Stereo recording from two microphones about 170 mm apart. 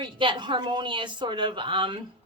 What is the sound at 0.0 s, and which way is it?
A woman's voice, 30° right (ahead or behind).